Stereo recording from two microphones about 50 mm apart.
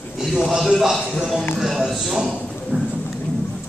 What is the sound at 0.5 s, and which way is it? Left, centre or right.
A man's voice, centre.